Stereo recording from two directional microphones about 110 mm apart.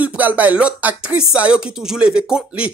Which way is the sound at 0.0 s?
15° right (ahead or behind).